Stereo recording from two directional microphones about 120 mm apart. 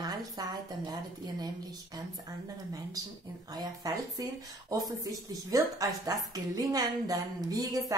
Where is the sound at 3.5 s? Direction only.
30° right (ahead or behind).